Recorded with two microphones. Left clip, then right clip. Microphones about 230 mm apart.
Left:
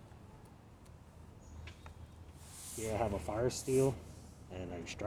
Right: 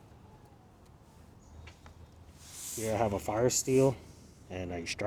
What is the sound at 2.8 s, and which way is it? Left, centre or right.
Speech, right.